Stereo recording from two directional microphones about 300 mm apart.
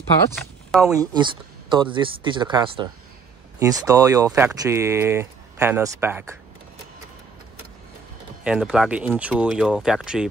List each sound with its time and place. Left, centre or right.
0.4 s speech: centre
0.9 s speech: centre
8.5 s speech: centre